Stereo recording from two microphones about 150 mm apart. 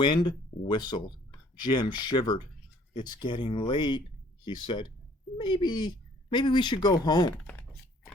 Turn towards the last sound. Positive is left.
turn(degrees=10)  # may be behind; listen again after turning